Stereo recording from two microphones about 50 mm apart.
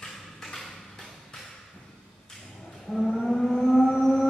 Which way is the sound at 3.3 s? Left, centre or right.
Centre.